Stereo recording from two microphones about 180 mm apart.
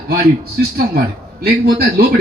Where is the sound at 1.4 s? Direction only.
60° right (ahead or behind).